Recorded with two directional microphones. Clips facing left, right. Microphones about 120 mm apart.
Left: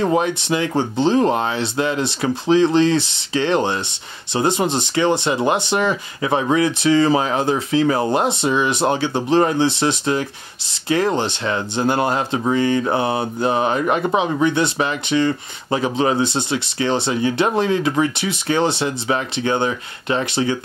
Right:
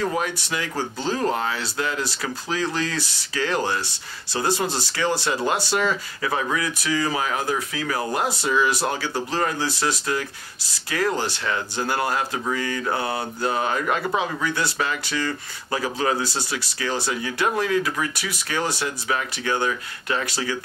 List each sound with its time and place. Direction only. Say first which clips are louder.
0.0 s speech: left 7 dB; 25° left (ahead or behind)